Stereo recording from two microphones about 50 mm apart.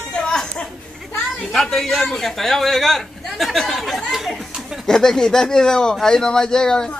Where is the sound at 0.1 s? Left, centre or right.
Centre.